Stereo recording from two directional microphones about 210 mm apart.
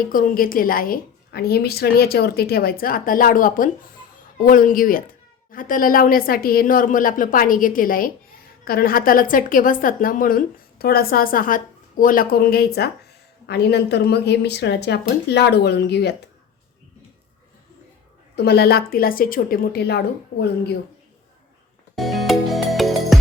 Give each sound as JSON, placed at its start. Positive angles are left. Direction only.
{"t": 0.0, "sound": "a woman's voice", "side_deg": 40}
{"t": 18.3, "sound": "a woman's voice", "side_deg": 50}
{"t": 21.9, "sound": "music", "side_deg": 0}